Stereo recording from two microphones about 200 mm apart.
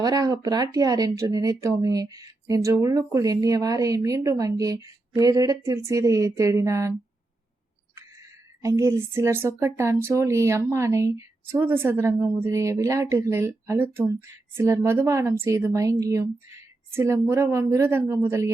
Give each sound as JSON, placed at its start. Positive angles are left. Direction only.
{"t": 0.0, "sound": "speech", "side_deg": -20}
{"t": 8.6, "sound": "speech", "side_deg": -15}